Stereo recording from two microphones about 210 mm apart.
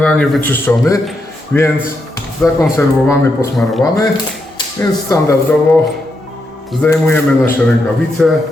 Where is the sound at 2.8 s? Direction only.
15° left (ahead or behind).